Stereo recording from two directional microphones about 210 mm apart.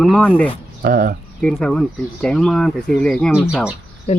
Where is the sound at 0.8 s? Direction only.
45° right (ahead or behind).